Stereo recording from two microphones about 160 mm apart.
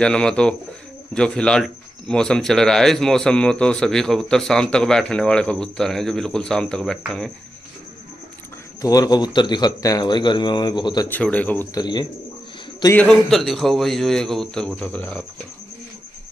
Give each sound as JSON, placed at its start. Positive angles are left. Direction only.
{"t": 0.0, "sound": "speech", "side_deg": 5}
{"t": 8.8, "sound": "speech", "side_deg": 25}
{"t": 11.1, "sound": "speech", "side_deg": 10}
{"t": 11.7, "sound": "speech", "side_deg": 25}
{"t": 12.9, "sound": "speech", "side_deg": 5}